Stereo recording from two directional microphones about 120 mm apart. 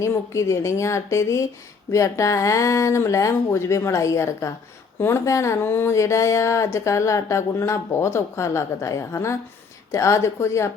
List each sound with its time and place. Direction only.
0.0 s speech: 25° left (ahead or behind)